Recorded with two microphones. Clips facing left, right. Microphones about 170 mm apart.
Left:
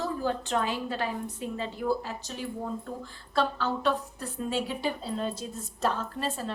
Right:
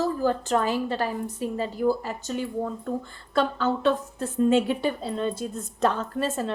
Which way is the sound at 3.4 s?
50° right (ahead or behind).